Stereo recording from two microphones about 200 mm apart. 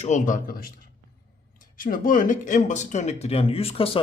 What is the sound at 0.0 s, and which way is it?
Speech, 40° left (ahead or behind).